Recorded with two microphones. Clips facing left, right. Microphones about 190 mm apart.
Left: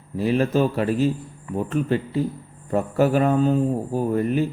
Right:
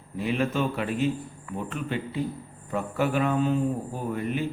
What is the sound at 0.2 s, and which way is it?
Speech, 40° left (ahead or behind).